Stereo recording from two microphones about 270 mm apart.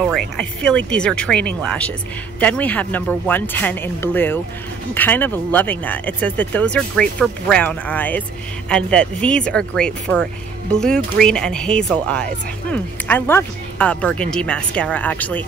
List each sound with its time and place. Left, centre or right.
0.4 s speech: centre